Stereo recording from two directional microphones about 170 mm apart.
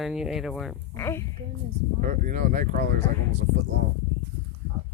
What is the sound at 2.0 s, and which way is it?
Speech, 55° right (ahead or behind).